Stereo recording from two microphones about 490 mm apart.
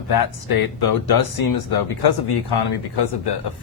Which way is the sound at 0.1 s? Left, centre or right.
Left.